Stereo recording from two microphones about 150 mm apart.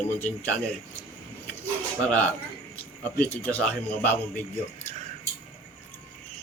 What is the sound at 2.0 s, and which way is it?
Speech, 5° left (ahead or behind).